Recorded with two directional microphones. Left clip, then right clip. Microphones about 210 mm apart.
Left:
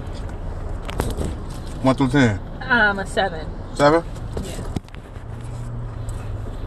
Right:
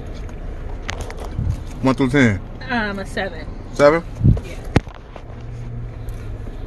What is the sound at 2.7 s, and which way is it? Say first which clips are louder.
Speech: left 6 dB; 10° right (ahead or behind).